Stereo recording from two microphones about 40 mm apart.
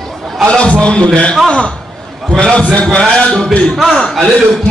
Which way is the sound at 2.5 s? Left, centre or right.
Left.